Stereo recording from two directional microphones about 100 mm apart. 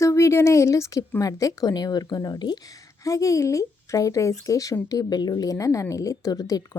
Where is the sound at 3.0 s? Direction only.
35° left (ahead or behind).